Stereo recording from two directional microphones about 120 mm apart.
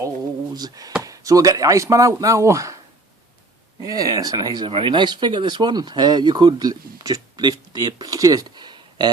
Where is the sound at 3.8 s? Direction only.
30° right (ahead or behind).